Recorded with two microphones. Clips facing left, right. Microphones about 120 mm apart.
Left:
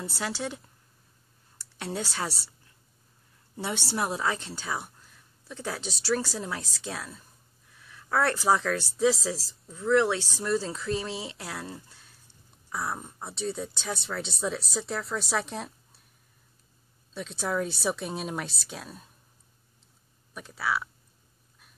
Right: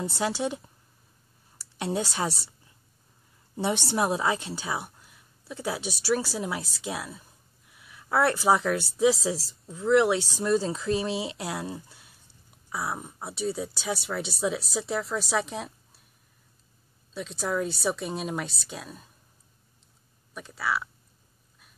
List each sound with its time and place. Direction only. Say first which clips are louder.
0.0 s speech: right 5 dB; 20° right (ahead or behind)
1.8 s a woman's voice: right 4 dB; 15° right (ahead or behind)
3.5 s a woman's voice: right 5 dB; 20° right (ahead or behind); by 16.0 s centre (ahead or behind)
17.1 s speech: right 1 dB; centre (ahead or behind)
20.3 s speech: even; centre (ahead or behind)